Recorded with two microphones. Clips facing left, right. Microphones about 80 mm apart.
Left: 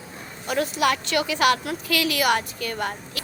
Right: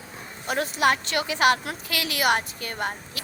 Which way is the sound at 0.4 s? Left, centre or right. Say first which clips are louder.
Even; right.